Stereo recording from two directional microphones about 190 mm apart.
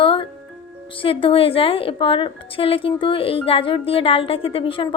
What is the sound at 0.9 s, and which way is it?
A woman's voice, 30° left (ahead or behind).